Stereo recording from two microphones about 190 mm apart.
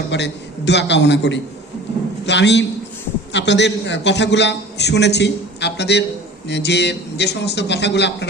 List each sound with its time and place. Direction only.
0.1 s a man's voice: 65° left (ahead or behind)